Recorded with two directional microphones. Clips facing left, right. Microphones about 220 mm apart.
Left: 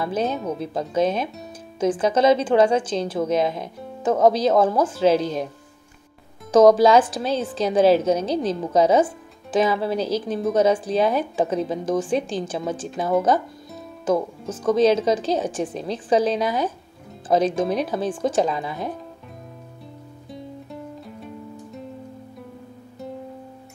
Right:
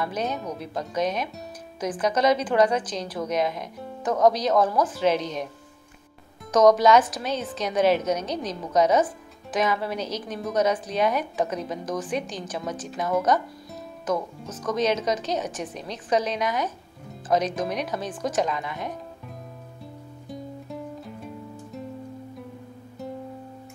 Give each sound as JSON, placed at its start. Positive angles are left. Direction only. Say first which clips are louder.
{"t": 0.0, "sound": "a woman's voice", "louder": "left 5 dB", "side_deg": 30}
{"t": 6.5, "sound": "a woman's voice", "louder": "left 4 dB", "side_deg": 30}
{"t": 14.5, "sound": "a woman's voice", "louder": "left 7 dB", "side_deg": 30}
{"t": 20.2, "sound": "music", "louder": "even", "side_deg": 0}